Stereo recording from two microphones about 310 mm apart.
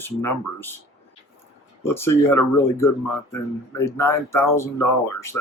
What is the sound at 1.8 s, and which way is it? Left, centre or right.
Speech, centre.